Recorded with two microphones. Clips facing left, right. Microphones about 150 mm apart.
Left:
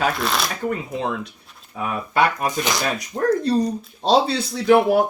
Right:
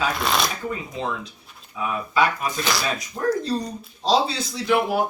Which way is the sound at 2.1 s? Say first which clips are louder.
Left 3 dB; 55° left (ahead or behind).